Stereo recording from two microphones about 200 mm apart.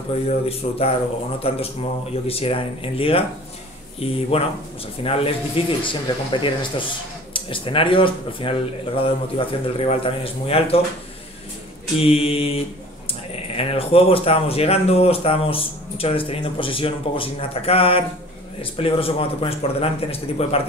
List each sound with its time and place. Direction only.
0.3 s speech: 30° left (ahead or behind)
12.0 s speech: 30° left (ahead or behind)
13.6 s speech: 30° left (ahead or behind)